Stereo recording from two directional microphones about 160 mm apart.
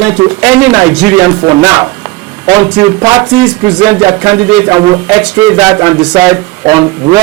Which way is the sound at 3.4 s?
5° right (ahead or behind).